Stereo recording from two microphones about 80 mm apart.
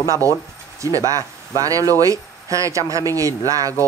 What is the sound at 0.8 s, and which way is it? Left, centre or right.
Speech, right.